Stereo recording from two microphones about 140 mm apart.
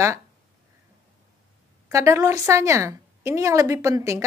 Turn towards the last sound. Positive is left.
turn(degrees=-20)  # may be behind; listen again after turning